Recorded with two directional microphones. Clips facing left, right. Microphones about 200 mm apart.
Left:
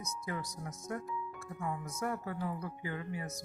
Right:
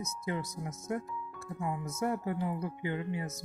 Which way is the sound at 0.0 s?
25° right (ahead or behind).